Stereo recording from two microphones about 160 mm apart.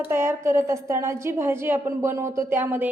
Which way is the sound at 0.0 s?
15° right (ahead or behind).